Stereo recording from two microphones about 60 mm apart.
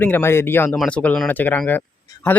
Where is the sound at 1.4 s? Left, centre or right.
Left.